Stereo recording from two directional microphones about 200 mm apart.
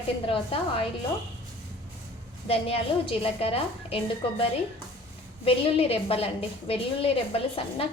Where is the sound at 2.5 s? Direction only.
25° left (ahead or behind).